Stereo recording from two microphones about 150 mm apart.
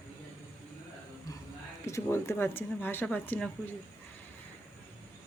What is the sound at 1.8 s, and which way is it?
Speech, 20° left (ahead or behind).